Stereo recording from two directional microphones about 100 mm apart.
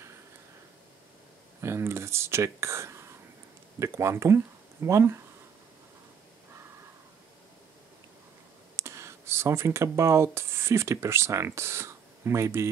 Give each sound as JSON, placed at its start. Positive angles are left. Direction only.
{"t": 1.6, "sound": "speech", "side_deg": -30}
{"t": 8.7, "sound": "speech", "side_deg": -30}